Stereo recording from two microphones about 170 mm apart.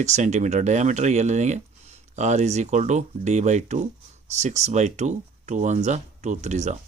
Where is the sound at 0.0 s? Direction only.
45° right (ahead or behind).